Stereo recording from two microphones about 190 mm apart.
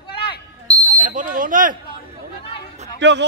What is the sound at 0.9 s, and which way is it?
Speech, 45° right (ahead or behind).